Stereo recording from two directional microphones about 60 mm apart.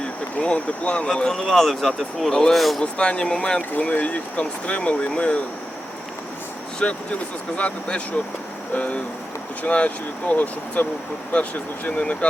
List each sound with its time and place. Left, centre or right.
0.0 s speech: centre
2.8 s speech: centre
3.8 s speech: left
6.8 s speech: centre